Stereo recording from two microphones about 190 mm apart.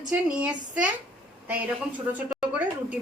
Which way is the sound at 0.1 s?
5° right (ahead or behind).